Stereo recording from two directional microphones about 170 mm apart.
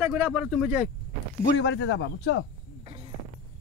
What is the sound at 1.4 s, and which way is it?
Speech, 85° left.